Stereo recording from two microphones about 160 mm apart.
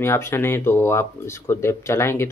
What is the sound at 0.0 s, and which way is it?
Speech, 15° left (ahead or behind).